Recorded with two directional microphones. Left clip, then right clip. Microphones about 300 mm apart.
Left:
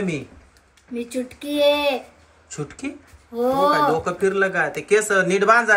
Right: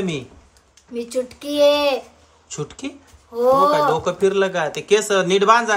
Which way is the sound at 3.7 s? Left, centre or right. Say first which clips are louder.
Right 1 dB; centre.